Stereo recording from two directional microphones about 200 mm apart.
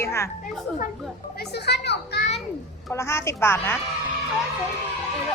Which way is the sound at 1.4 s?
55° left (ahead or behind).